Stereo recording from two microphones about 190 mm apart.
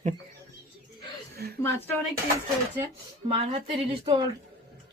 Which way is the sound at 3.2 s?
30° right (ahead or behind).